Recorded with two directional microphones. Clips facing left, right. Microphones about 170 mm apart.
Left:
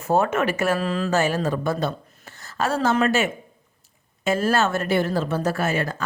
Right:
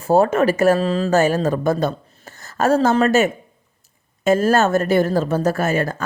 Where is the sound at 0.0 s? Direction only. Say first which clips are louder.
Right 6 dB; 35° right (ahead or behind).